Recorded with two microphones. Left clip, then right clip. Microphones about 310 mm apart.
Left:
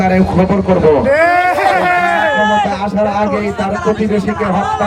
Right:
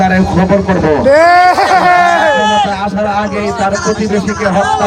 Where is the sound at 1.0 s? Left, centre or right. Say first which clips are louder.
Right 5 dB; right.